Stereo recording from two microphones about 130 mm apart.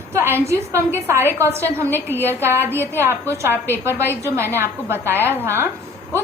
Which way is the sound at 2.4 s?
20° right (ahead or behind).